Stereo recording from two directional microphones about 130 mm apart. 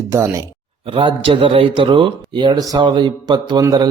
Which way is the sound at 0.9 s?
45° right (ahead or behind).